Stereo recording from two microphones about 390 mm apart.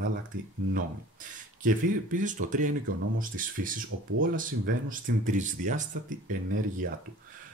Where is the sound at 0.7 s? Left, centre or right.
Right.